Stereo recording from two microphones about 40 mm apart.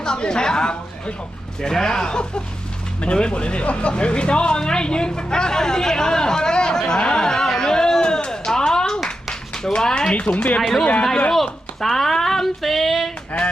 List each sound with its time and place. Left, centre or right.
0.0 s speech: centre
7.0 s speech: left
7.3 s a sound: centre
9.7 s speech: left
10.6 s speech: centre
11.3 s child singing: centre